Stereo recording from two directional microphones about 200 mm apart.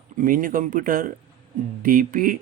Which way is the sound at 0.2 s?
40° right (ahead or behind).